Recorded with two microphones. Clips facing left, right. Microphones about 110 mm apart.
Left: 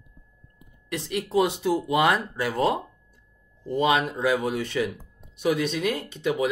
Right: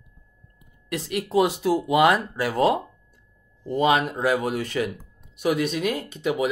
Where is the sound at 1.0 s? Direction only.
5° right (ahead or behind).